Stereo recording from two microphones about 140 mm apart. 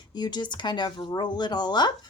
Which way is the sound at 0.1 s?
30° left (ahead or behind).